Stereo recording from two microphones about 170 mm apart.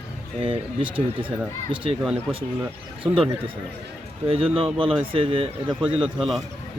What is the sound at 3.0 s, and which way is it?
Speech, 30° right (ahead or behind).